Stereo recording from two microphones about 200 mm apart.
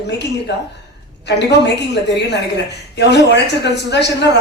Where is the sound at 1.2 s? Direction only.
60° left (ahead or behind).